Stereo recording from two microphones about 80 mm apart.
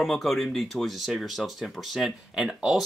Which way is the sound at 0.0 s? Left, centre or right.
Centre.